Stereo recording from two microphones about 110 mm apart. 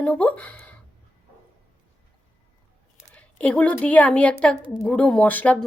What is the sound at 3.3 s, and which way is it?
Speech, 15° left (ahead or behind).